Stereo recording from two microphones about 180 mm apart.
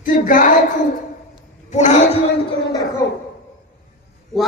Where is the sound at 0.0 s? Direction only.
50° left (ahead or behind).